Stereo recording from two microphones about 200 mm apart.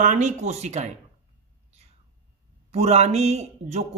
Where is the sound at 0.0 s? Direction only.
35° right (ahead or behind).